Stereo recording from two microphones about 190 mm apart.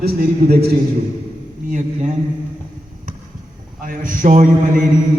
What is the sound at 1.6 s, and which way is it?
Speech, 40° right (ahead or behind).